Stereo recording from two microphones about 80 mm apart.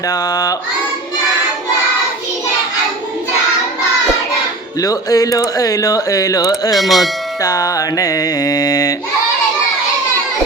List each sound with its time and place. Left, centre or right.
0.1 s speech: left
4.8 s speech: left
6.7 s speech: centre
7.4 s speech: left